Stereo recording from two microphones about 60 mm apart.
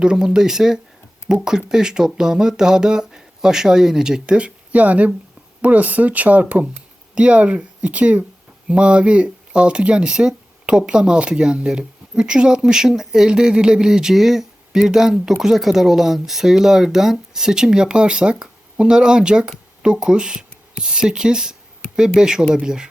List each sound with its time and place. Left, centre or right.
0.0 s speech: centre